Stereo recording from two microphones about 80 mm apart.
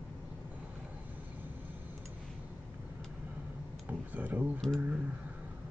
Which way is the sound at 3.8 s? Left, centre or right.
Right.